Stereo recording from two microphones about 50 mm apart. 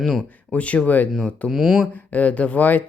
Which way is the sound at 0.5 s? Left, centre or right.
Left.